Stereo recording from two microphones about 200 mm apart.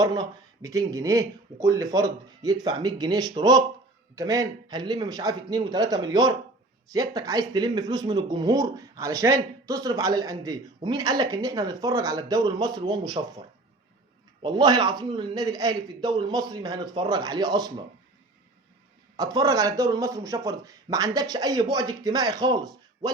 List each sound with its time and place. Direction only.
0.0 s speech: 20° right (ahead or behind)
14.4 s speech: 20° right (ahead or behind)
19.1 s speech: 15° right (ahead or behind)